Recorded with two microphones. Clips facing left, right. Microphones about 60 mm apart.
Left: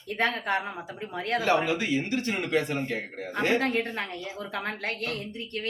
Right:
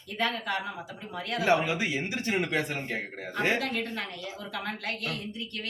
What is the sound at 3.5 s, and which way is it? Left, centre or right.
A woman's voice, left.